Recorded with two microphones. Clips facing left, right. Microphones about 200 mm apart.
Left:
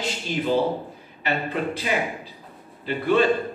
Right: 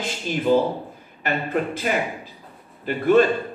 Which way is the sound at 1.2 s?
50° right (ahead or behind).